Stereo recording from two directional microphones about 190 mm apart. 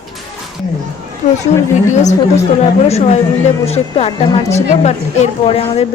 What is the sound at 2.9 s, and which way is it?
A woman's voice, 35° left (ahead or behind).